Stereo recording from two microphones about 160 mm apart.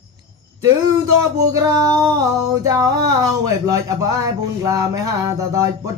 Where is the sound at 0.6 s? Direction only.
20° right (ahead or behind).